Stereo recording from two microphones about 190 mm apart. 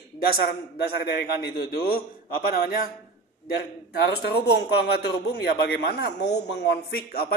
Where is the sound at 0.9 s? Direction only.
60° left (ahead or behind).